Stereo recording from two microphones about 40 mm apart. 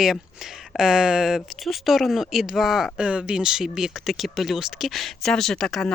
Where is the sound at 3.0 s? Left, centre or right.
Right; by 4.9 s centre.